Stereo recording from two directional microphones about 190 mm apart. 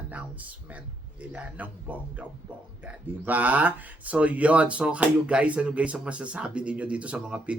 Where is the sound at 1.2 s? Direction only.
5° right (ahead or behind).